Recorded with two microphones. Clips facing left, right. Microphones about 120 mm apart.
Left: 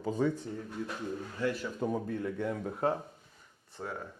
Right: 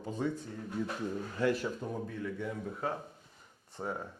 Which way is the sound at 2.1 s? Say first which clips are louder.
Left 4 dB; 60° left (ahead or behind).